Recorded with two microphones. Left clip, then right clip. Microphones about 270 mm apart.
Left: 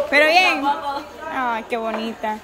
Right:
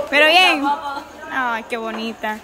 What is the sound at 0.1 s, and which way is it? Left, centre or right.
A woman's voice, centre.